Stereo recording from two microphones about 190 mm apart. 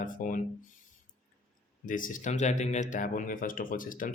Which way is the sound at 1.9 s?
45° left (ahead or behind).